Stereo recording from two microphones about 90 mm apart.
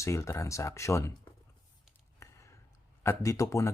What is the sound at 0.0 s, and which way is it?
Speech, 35° left (ahead or behind).